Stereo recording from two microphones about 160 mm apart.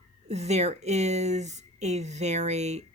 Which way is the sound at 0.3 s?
45° right (ahead or behind).